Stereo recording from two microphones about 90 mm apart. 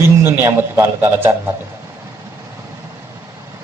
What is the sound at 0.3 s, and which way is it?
A man's voice, 25° right (ahead or behind).